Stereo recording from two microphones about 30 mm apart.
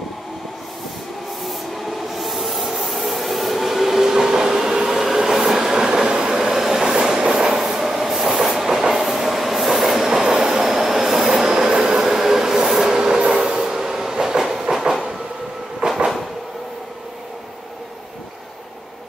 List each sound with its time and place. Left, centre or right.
1.4 s rub: centre
5.9 s train: right
6.4 s train: centre
6.8 s train: right
11.4 s train: right
12.9 s train: right
15.8 s train: right